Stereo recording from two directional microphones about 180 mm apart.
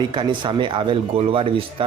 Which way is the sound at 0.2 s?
25° right (ahead or behind).